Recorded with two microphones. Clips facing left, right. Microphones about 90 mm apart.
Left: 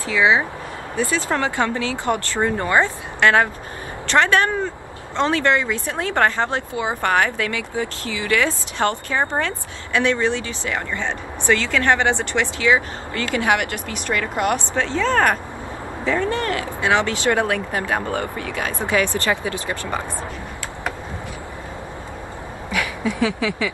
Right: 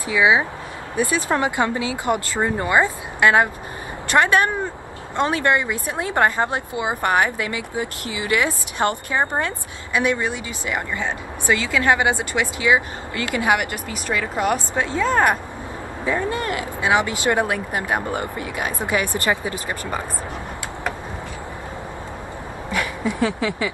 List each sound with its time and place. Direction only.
0.0 s a woman's voice: 15° right (ahead or behind)
13.5 s a woman's voice: 5° right (ahead or behind)